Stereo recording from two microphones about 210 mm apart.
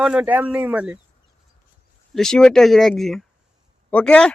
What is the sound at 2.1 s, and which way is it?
Speech, 5° left (ahead or behind).